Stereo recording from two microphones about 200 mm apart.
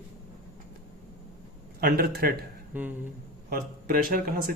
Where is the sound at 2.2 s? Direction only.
50° right (ahead or behind).